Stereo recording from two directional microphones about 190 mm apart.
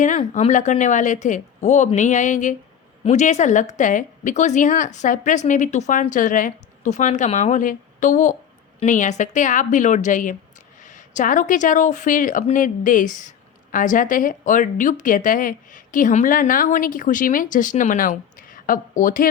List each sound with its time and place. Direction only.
0.0 s a woman's voice: 40° left (ahead or behind)